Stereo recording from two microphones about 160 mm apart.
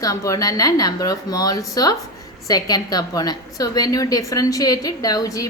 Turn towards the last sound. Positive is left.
turn(degrees=20)  # may be behind; listen again after turning